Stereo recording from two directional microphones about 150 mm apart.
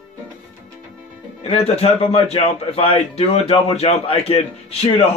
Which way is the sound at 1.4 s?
45° left (ahead or behind).